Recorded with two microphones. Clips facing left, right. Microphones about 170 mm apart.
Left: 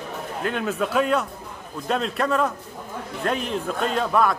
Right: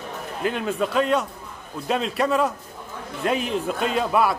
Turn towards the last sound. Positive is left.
turn(degrees=-5)  # may be behind; listen again after turning